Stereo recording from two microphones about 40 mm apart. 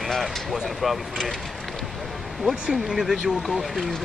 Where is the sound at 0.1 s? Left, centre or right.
Centre.